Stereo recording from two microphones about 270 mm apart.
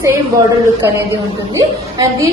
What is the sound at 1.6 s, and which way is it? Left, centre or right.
Speech, centre.